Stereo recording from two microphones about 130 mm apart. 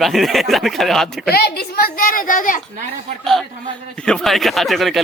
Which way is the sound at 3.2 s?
Centre (ahead or behind).